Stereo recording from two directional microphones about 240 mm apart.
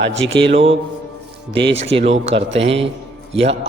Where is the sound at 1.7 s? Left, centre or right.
Right.